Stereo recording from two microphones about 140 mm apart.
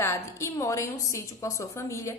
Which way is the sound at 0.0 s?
20° left (ahead or behind).